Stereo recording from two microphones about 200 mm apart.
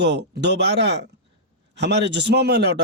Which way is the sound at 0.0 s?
60° right (ahead or behind).